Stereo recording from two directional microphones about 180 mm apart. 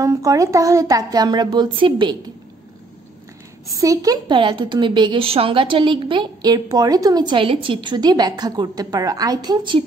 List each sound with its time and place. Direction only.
0.0 s a woman's voice: 20° right (ahead or behind)
3.7 s a woman's voice: 20° right (ahead or behind)